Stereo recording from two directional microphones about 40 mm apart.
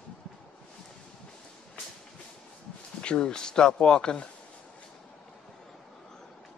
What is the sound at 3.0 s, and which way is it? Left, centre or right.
Speech, left.